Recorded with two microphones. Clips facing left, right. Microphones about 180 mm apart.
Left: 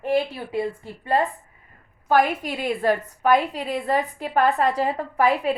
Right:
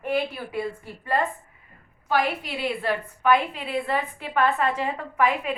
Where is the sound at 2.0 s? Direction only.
45° left (ahead or behind).